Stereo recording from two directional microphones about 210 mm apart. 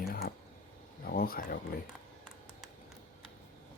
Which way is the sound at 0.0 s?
45° left (ahead or behind).